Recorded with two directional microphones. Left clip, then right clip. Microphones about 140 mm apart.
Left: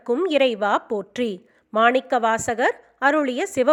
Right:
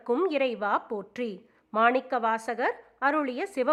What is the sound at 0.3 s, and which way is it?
A woman's voice, 30° left (ahead or behind).